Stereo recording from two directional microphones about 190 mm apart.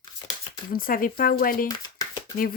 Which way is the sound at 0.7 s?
50° left (ahead or behind).